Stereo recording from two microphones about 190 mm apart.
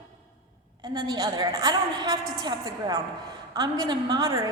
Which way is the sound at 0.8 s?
25° right (ahead or behind).